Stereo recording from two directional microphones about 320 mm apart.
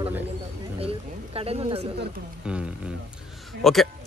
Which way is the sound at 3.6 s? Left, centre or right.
Centre.